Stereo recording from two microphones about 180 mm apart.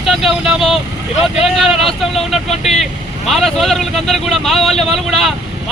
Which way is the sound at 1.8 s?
35° left (ahead or behind).